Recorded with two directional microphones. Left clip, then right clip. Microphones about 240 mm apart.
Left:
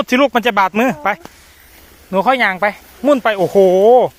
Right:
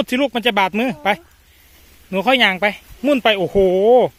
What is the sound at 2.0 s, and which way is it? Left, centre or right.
A man's voice, centre.